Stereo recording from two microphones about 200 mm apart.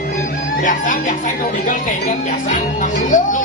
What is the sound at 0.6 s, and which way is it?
Speech, 40° left (ahead or behind).